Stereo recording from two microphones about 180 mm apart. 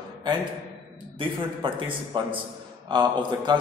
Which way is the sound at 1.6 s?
25° right (ahead or behind).